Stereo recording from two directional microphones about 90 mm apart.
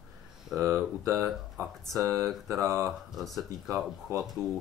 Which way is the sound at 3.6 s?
35° right (ahead or behind).